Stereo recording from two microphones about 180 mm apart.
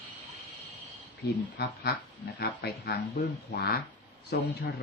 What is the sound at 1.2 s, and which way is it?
Speech, 60° left (ahead or behind).